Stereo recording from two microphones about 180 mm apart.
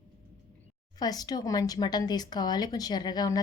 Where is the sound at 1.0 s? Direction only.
20° left (ahead or behind).